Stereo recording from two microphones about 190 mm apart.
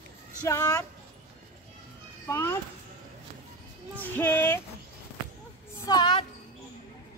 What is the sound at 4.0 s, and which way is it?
Speech, 10° left (ahead or behind).